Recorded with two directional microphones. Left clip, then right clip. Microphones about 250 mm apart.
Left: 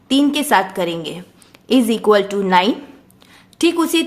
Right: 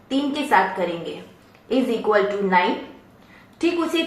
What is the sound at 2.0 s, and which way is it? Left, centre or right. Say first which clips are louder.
Speech: left 5 dB; left.